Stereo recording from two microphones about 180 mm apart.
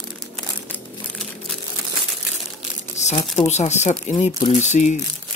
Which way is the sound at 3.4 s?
40° left (ahead or behind).